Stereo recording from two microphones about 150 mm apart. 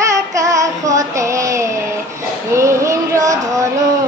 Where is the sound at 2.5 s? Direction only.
20° right (ahead or behind).